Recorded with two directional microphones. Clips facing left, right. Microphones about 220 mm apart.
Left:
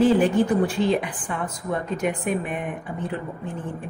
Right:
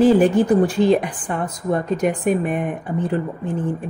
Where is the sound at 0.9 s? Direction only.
40° right (ahead or behind).